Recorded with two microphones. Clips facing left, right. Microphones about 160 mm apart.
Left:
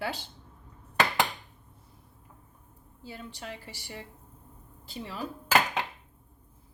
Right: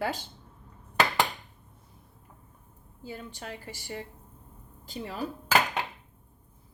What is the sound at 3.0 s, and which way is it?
A woman's voice, 45° right (ahead or behind).